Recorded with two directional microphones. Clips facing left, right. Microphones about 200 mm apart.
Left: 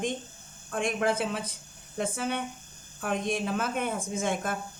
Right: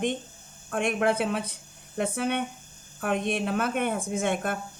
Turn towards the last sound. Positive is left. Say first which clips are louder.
# right 3 dB
turn(degrees=-60)  # may be behind; listen again after turning